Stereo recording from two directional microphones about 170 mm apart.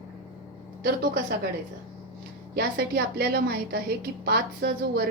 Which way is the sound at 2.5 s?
70° right (ahead or behind).